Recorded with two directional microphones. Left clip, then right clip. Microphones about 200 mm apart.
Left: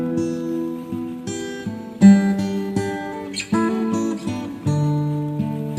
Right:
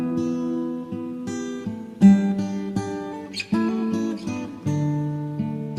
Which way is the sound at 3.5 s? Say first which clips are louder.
Left 4 dB; 30° right (ahead or behind).